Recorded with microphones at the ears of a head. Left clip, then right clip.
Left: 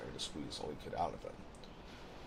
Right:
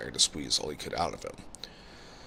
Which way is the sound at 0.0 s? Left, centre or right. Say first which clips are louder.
Right 15 dB; right.